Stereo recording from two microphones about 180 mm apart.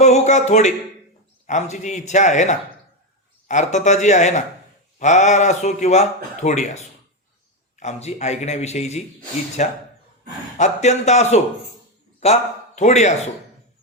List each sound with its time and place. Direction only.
0.0 s a man's voice: 40° left (ahead or behind)